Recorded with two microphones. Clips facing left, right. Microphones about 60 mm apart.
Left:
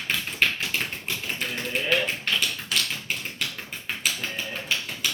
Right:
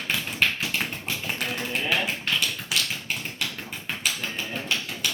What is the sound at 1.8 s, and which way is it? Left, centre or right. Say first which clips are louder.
Tap: left 2 dB; centre.